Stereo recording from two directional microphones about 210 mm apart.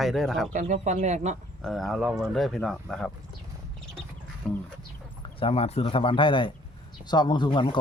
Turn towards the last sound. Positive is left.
turn(degrees=25)  # may be behind; listen again after turning